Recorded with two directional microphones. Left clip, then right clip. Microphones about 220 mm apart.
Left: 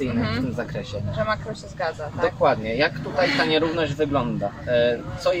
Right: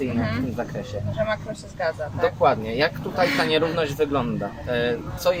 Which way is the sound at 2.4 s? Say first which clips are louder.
Even; 25° right (ahead or behind).